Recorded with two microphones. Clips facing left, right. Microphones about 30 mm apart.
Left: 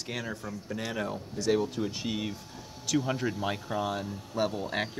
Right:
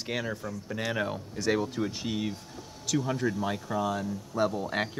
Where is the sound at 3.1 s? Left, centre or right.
Centre.